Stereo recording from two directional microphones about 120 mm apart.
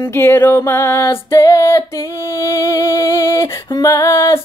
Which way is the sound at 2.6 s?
20° left (ahead or behind).